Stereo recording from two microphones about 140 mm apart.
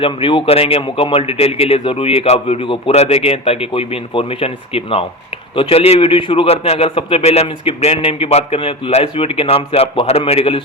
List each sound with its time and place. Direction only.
0.0 s speech: 40° left (ahead or behind)